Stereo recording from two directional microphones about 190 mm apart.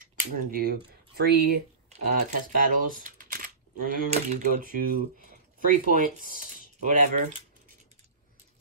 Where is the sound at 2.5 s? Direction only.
45° right (ahead or behind).